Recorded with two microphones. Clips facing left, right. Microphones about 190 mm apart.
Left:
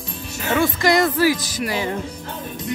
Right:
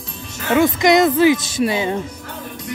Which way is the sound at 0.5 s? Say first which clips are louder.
Right 4 dB; 20° right (ahead or behind).